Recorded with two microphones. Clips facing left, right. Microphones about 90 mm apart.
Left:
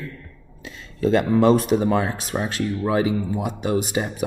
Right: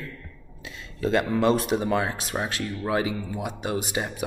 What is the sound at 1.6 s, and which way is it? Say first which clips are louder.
Speech: left 4 dB; 35° left (ahead or behind).